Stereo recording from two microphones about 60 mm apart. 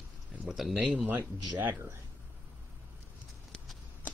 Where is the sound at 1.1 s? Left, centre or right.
Right.